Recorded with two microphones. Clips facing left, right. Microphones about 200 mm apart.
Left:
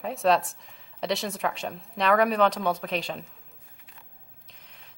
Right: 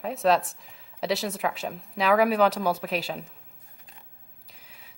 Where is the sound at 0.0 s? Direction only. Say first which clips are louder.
Even; centre (ahead or behind).